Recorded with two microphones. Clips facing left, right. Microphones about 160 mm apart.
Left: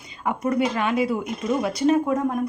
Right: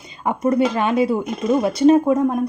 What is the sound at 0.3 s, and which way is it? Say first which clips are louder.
Speech: right 5 dB; 30° right (ahead or behind).